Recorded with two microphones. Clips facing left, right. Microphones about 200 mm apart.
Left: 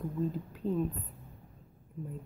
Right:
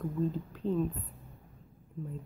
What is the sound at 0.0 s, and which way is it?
Speech, 10° left (ahead or behind).